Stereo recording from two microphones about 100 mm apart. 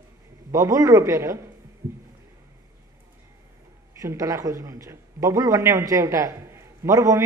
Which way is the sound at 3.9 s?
35° right (ahead or behind).